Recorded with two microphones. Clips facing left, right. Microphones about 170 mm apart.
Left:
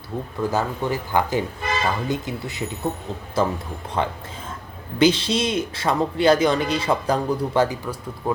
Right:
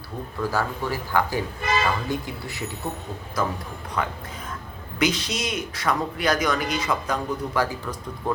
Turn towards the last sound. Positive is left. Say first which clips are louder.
# left 5 dB
turn(degrees=25)  # may be behind; listen again after turning